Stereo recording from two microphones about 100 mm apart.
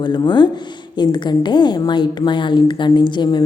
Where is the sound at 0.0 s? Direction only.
50° left (ahead or behind).